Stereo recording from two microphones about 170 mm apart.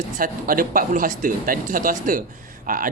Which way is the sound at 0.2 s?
55° right (ahead or behind).